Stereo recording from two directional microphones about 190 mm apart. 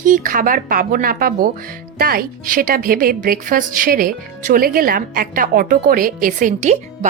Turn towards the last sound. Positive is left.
turn(degrees=-40)  # may be behind; listen again after turning